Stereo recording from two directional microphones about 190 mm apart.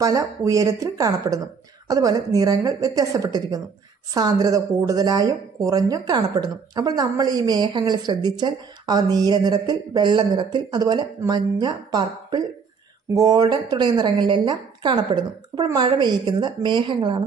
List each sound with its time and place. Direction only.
0.0 s a woman's voice: 15° right (ahead or behind)